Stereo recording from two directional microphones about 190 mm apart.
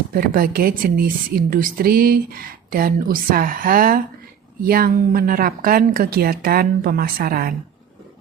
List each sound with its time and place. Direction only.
0.1 s a woman's voice: 50° right (ahead or behind)